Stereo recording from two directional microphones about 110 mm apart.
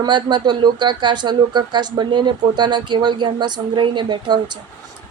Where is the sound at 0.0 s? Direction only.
45° right (ahead or behind).